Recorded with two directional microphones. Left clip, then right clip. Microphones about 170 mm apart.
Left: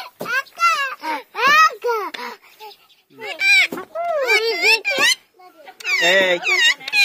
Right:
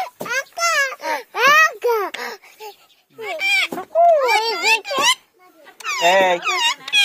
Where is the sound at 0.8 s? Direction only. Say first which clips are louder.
Right 1 dB; 60° right (ahead or behind).